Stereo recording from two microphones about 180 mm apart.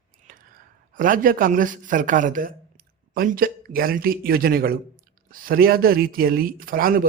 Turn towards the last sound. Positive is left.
turn(degrees=-50)  # may be behind; listen again after turning